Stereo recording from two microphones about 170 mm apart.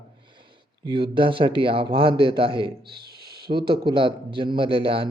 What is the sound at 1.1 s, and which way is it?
Speech, 30° right (ahead or behind).